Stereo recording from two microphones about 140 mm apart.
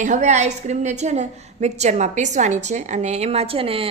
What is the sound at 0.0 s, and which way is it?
A woman's voice, 60° right (ahead or behind).